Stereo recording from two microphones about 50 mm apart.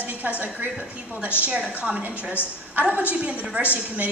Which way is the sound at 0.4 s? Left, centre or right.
Right.